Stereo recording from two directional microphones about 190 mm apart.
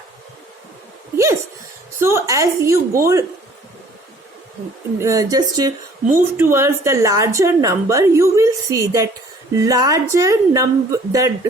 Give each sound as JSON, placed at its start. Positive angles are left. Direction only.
{"t": 2.0, "sound": "a woman's voice", "side_deg": -15}
{"t": 4.9, "sound": "a woman's voice", "side_deg": -15}